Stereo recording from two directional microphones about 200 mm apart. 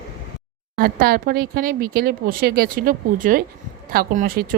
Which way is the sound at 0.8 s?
45° right (ahead or behind).